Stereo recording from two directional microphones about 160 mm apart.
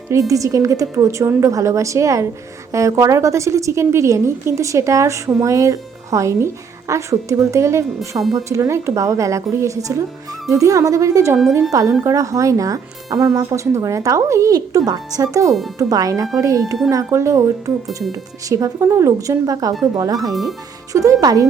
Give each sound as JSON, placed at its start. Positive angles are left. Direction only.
{"t": 0.1, "sound": "a woman's voice", "side_deg": -20}
{"t": 20.3, "sound": "speech", "side_deg": 0}
{"t": 20.9, "sound": "a woman's voice", "side_deg": -20}